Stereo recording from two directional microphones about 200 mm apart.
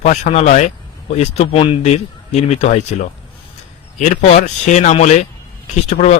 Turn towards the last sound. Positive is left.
turn(degrees=35)  # may be behind; listen again after turning